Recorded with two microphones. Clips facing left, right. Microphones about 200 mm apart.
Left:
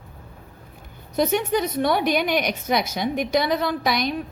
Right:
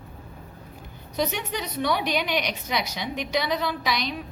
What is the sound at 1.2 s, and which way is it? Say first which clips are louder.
A woman's voice: left 7 dB; 50° left (ahead or behind).